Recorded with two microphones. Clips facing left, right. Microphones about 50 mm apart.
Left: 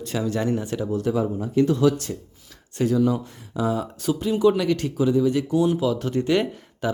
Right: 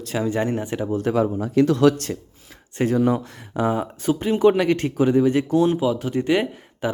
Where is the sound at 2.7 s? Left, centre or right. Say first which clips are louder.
Right 1 dB; right.